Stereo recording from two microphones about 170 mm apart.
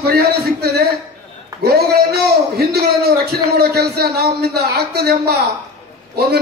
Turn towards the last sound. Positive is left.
turn(degrees=-70)  # may be behind; listen again after turning